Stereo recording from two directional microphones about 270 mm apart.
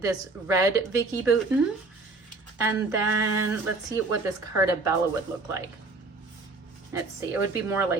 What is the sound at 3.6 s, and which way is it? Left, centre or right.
Speech, right.